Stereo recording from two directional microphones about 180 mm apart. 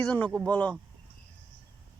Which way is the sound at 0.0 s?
5° left (ahead or behind).